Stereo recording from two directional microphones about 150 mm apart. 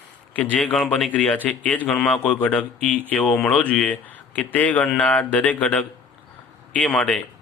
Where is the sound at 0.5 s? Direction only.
5° left (ahead or behind).